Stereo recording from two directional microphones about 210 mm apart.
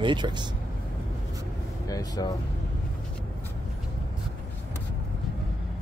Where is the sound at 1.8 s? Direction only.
15° left (ahead or behind).